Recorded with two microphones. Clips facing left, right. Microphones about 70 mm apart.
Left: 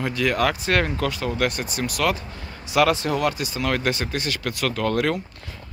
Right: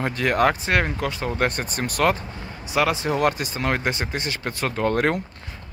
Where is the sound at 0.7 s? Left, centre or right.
Centre; by 2.1 s right.